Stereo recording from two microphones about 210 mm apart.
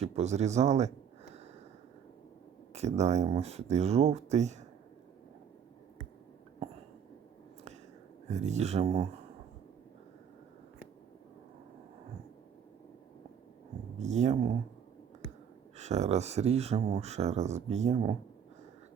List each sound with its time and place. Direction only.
0.0 s speech: 30° right (ahead or behind)
2.7 s speech: 30° right (ahead or behind)
8.3 s speech: 35° right (ahead or behind)
14.0 s speech: 35° right (ahead or behind)
15.8 s speech: 35° right (ahead or behind)